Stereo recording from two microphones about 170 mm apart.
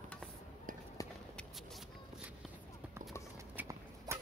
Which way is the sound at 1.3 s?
Centre (ahead or behind).